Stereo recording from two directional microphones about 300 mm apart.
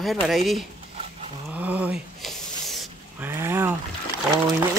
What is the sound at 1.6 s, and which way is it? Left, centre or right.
Spray, centre.